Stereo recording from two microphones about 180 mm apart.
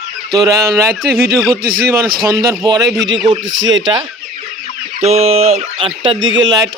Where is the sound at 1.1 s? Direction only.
60° right (ahead or behind).